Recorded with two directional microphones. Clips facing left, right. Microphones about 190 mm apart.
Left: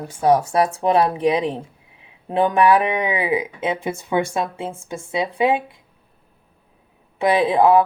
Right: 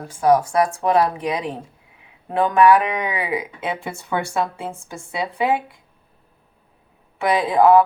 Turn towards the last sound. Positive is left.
turn(degrees=20)  # may be behind; listen again after turning